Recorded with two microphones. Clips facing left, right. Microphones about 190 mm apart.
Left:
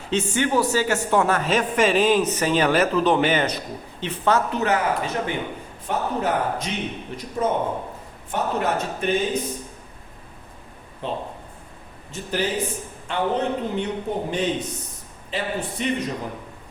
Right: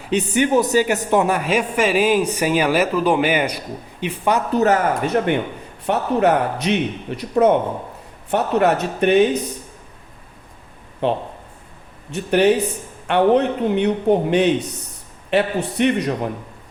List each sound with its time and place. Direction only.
0.1 s a man's voice: 15° right (ahead or behind)
4.5 s speech: 40° right (ahead or behind)
5.0 s speech: 60° right (ahead or behind)
11.0 s speech: 70° right (ahead or behind)